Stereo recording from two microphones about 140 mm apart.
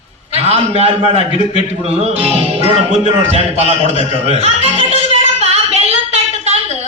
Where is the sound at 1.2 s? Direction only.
50° left (ahead or behind).